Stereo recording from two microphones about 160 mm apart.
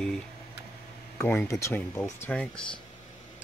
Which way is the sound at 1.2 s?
15° left (ahead or behind).